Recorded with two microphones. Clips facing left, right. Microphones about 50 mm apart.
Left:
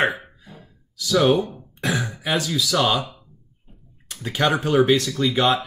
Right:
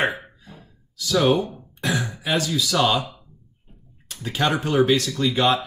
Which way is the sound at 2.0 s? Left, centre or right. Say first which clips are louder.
Even; left.